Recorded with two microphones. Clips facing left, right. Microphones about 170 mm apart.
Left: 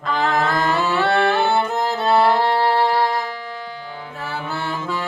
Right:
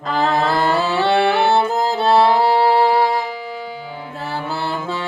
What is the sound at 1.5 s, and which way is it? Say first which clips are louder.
Music: right 3 dB; 30° right (ahead or behind).